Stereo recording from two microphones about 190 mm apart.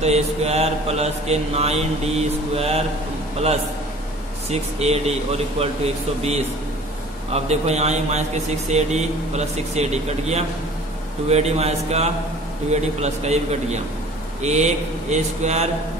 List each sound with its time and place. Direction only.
0.0 s mantra: 35° right (ahead or behind)
4.5 s mantra: 35° right (ahead or behind)
7.3 s mantra: 35° right (ahead or behind)